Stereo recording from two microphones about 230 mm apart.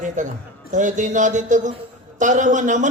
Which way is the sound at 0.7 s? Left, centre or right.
Right.